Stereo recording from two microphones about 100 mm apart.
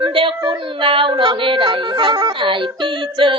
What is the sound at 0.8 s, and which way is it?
Speech, 60° right (ahead or behind).